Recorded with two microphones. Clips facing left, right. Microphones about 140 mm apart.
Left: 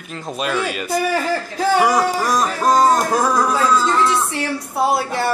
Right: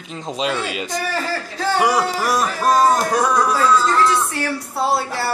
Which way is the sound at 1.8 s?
10° right (ahead or behind).